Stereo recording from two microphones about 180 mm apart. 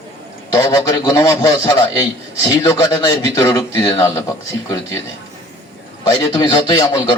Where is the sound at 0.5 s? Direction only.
20° left (ahead or behind).